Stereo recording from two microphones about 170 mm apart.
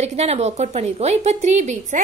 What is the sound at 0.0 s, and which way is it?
Speech, 40° right (ahead or behind).